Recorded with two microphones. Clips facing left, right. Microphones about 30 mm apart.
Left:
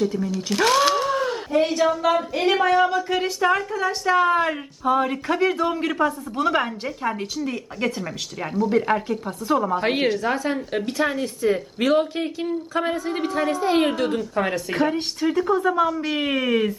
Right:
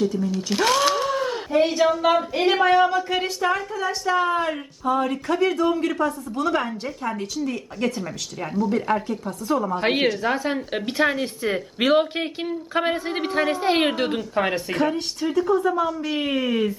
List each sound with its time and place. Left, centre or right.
0.0 s a woman's voice: centre
9.7 s a woman's voice: centre; by 14.2 s right
14.2 s a woman's voice: centre
14.7 s speech: centre
15.2 s speech: centre